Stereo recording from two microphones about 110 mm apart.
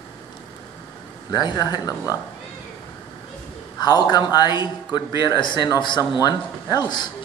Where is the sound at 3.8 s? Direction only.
40° left (ahead or behind).